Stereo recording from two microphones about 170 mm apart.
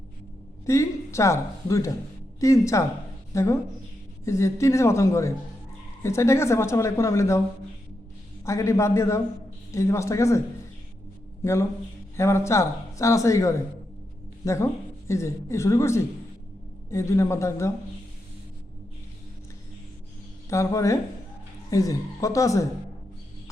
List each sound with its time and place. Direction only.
0.6 s a woman's voice: 15° left (ahead or behind)
8.4 s speech: 15° left (ahead or behind)
12.1 s speech: 15° left (ahead or behind)
20.5 s speech: 15° left (ahead or behind)